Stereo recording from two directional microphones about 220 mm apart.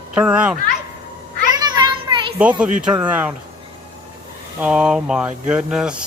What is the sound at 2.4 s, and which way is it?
Speech, 5° right (ahead or behind).